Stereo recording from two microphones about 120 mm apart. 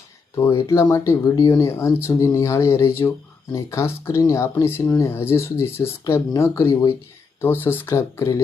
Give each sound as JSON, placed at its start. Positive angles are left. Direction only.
{"t": 0.3, "sound": "speech", "side_deg": 20}